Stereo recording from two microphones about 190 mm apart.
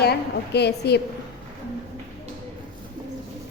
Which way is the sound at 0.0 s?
60° left (ahead or behind).